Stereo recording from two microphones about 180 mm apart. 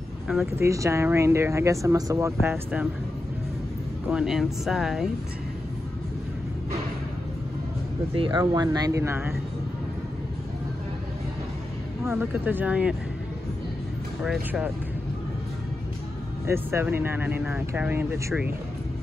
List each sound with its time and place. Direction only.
0.5 s speech: 15° right (ahead or behind)
4.1 s speech: 5° right (ahead or behind)
8.1 s speech: 25° right (ahead or behind)
12.0 s speech: 10° right (ahead or behind)
14.2 s speech: 5° right (ahead or behind)
16.4 s speech: 15° right (ahead or behind)